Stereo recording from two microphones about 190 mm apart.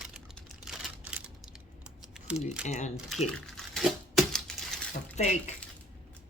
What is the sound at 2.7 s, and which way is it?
Speech, 40° left (ahead or behind).